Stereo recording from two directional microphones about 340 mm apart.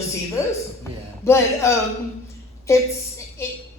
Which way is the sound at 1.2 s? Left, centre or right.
Centre.